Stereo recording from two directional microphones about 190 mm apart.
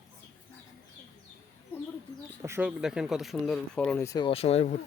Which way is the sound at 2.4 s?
15° right (ahead or behind).